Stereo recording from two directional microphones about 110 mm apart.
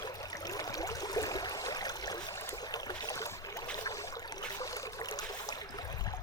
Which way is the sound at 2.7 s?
35° left (ahead or behind).